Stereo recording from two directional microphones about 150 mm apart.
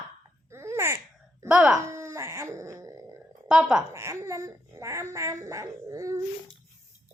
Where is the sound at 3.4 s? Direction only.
5° right (ahead or behind).